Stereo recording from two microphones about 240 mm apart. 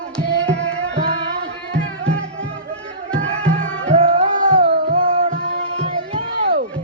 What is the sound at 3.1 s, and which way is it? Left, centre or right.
Music, centre.